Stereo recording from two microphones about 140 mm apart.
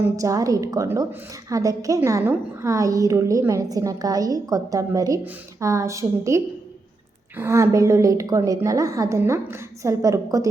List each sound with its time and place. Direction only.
0.2 s a woman's voice: 25° right (ahead or behind)